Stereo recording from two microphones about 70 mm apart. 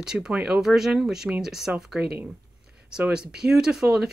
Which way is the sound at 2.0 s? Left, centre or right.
Right.